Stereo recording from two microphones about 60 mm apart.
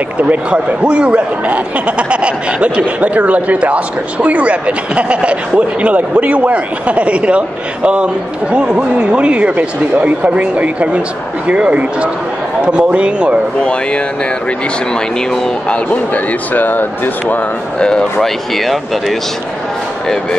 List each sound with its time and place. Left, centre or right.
0.2 s a man's voice: right
13.6 s speech: centre
15.7 s speech: left
17.7 s speech: centre
18.2 s speech: centre